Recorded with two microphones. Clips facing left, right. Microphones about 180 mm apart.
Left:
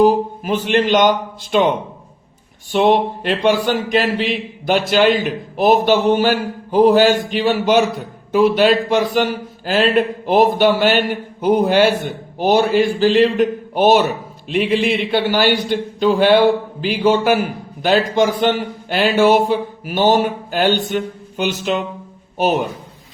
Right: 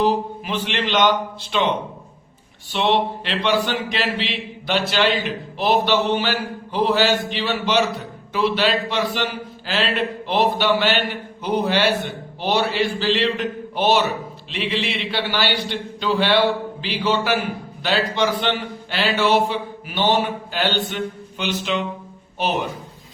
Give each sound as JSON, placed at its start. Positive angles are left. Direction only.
{"t": 0.0, "sound": "speech", "side_deg": 45}
{"t": 2.7, "sound": "speech", "side_deg": 45}
{"t": 20.9, "sound": "a sound", "side_deg": 45}